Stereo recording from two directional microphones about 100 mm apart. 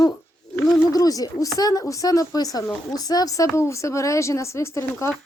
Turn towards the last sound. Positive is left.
turn(degrees=30)  # may be behind; listen again after turning